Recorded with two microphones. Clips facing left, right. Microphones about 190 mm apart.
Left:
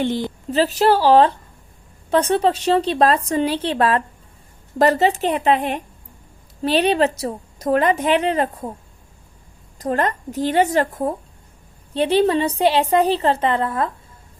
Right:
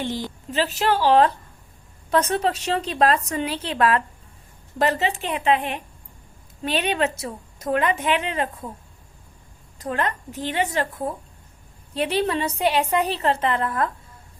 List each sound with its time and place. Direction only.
0.0 s a woman's voice: 60° left (ahead or behind)
0.5 s a woman's voice: 35° left (ahead or behind)
9.7 s a woman's voice: 40° left (ahead or behind)
11.9 s a woman's voice: 30° left (ahead or behind)